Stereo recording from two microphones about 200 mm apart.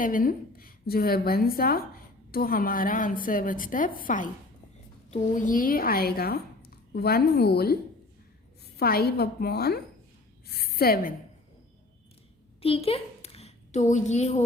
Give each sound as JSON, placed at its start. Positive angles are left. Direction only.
{"t": 0.0, "sound": "a woman's voice", "side_deg": 45}
{"t": 8.8, "sound": "a woman's voice", "side_deg": 50}
{"t": 12.6, "sound": "a woman's voice", "side_deg": 30}